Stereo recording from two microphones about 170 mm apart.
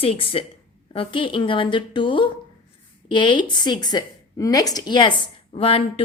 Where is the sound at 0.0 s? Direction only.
35° left (ahead or behind).